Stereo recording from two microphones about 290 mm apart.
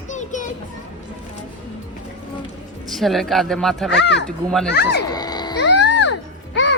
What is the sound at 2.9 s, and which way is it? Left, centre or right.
Speech, centre.